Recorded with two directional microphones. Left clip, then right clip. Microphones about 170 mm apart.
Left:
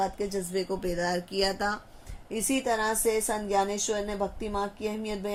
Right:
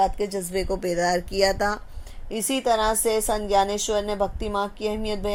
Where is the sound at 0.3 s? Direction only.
35° right (ahead or behind).